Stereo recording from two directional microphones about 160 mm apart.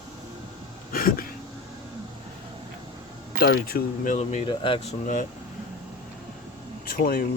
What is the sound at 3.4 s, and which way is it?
Speech, 75° left (ahead or behind).